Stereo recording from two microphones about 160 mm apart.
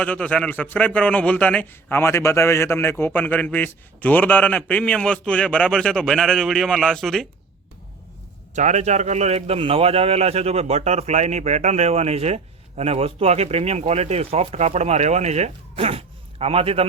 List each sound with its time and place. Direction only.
0.0 s a man's voice: 10° left (ahead or behind)
8.5 s a man's voice: 50° right (ahead or behind)